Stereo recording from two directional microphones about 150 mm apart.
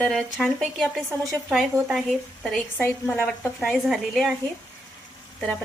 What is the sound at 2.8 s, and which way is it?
A woman's voice, 10° left (ahead or behind).